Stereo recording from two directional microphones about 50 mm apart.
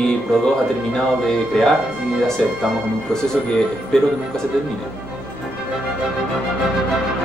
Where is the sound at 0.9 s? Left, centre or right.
Centre.